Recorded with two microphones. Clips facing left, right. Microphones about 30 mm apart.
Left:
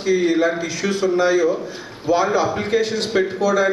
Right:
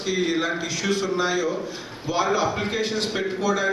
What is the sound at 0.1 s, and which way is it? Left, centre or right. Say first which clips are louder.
A man's voice: left 7 dB; centre.